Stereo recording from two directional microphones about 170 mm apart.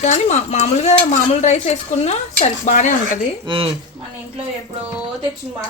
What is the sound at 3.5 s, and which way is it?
Speech, 30° right (ahead or behind).